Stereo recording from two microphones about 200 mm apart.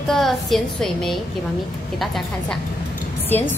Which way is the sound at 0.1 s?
Centre (ahead or behind).